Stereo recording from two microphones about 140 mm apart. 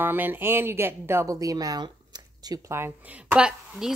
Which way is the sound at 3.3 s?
5° right (ahead or behind).